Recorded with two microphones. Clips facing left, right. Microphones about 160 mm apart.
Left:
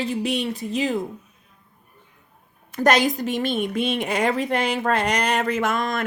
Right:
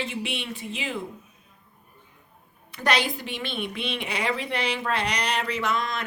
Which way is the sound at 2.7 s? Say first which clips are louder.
Left 7 dB; 45° left (ahead or behind).